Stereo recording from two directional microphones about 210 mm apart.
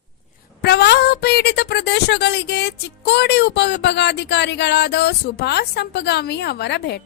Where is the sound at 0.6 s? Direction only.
50° left (ahead or behind).